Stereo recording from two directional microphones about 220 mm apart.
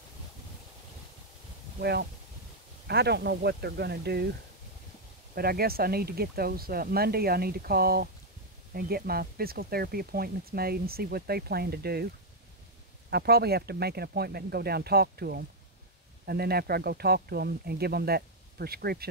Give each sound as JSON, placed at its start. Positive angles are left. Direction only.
{"t": 1.8, "sound": "speech", "side_deg": -45}
{"t": 5.3, "sound": "speech", "side_deg": -45}
{"t": 13.1, "sound": "speech", "side_deg": -45}